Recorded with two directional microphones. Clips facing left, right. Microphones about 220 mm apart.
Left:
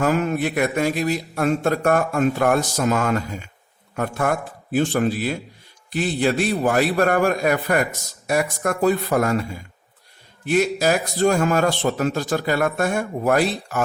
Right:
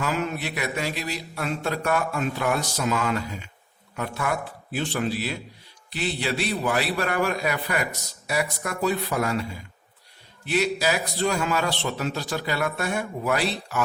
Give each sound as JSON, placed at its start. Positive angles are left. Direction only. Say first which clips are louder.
{"t": 0.0, "sound": "a man's voice", "louder": "left 7 dB", "side_deg": 50}